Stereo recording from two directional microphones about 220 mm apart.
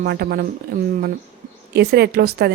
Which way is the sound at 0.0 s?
45° right (ahead or behind).